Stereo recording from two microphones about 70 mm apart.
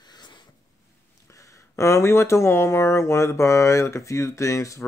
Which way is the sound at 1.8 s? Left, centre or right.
Left.